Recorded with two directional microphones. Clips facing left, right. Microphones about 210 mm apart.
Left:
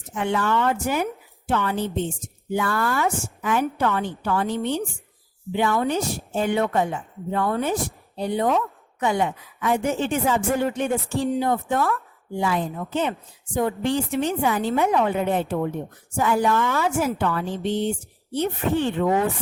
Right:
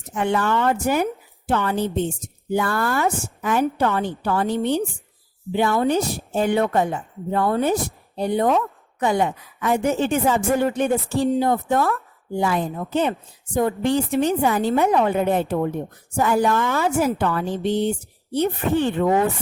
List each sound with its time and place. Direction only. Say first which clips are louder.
0.1 s a woman's voice: right 2 dB; 40° right (ahead or behind)
8.1 s a woman's voice: right 3 dB; 50° right (ahead or behind)